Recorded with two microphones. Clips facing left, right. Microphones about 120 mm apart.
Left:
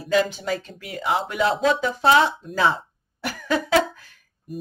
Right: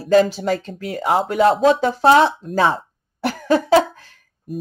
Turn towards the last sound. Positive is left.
turn(degrees=-40)  # may be behind; listen again after turning